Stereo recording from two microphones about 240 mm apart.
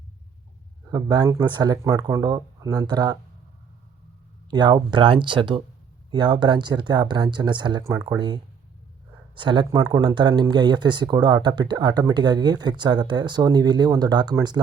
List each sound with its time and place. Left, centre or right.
0.9 s speech: centre
4.5 s speech: centre